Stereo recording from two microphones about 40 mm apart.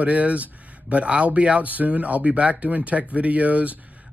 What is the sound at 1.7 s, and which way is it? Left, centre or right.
Speech, right.